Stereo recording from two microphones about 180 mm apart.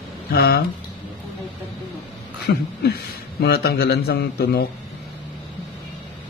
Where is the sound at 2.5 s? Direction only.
65° left (ahead or behind).